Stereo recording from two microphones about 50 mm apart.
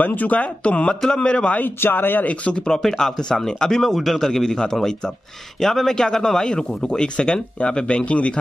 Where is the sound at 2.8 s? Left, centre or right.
Centre.